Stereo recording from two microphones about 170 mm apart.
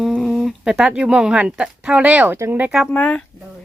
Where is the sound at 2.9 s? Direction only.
5° left (ahead or behind).